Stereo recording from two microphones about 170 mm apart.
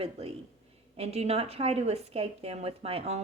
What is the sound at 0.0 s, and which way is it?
Speech, 35° right (ahead or behind).